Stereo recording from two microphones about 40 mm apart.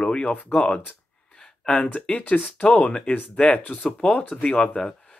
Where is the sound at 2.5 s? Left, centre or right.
Left.